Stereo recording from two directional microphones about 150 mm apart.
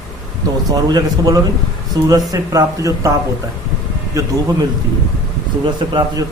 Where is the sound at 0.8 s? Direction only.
25° right (ahead or behind).